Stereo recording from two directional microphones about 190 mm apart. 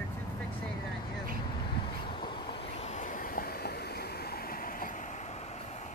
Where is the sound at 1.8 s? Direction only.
25° left (ahead or behind).